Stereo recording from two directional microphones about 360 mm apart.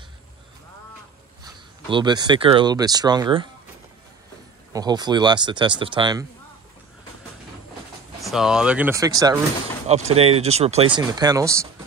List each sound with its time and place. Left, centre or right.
1.4 s speech: centre
4.7 s speech: centre
8.2 s speech: centre